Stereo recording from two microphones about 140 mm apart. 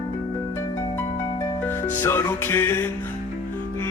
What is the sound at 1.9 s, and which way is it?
Music, 15° left (ahead or behind).